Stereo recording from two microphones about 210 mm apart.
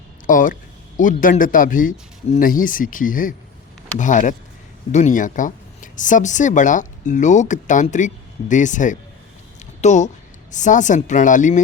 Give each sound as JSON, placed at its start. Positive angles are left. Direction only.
{"t": 0.3, "sound": "speech", "side_deg": 40}